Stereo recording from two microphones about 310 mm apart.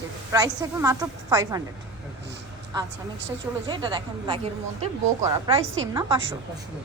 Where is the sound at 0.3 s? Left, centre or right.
Centre.